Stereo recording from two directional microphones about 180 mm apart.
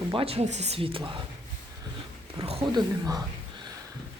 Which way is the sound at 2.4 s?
20° right (ahead or behind).